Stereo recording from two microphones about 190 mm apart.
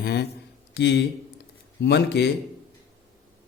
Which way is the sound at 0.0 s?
55° left (ahead or behind).